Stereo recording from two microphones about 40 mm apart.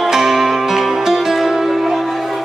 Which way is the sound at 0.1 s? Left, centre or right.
Centre.